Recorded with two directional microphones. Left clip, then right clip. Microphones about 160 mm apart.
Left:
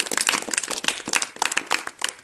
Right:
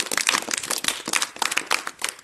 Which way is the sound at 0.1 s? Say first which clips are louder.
Even; 35° left (ahead or behind).